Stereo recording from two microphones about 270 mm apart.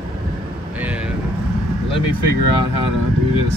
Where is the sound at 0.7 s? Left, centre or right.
Centre.